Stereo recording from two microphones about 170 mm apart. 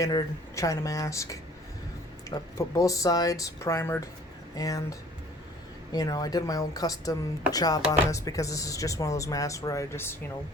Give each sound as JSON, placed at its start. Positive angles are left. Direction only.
{"t": 0.0, "sound": "speech", "side_deg": 20}